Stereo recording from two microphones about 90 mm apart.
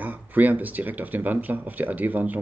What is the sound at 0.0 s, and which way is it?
Speech, 20° right (ahead or behind).